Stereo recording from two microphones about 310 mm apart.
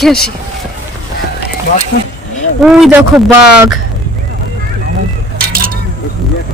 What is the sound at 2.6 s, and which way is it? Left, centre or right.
Speech, centre.